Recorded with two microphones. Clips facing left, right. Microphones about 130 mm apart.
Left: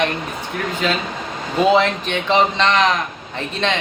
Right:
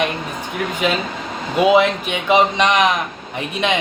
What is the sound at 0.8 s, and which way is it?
Speech, 15° right (ahead or behind).